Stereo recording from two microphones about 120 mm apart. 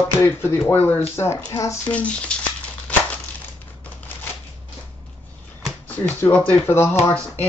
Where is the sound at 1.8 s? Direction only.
10° left (ahead or behind).